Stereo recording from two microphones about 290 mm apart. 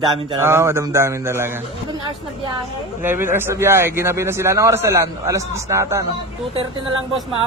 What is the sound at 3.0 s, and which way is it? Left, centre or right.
A man's voice, centre.